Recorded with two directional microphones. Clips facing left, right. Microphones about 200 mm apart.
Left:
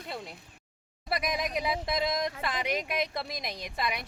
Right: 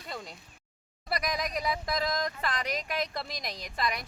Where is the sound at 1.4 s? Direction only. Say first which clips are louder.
Left 1 dB; 20° left (ahead or behind).